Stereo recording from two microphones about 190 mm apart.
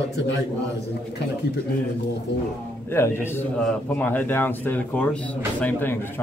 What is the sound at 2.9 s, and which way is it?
A man's voice, 10° left (ahead or behind).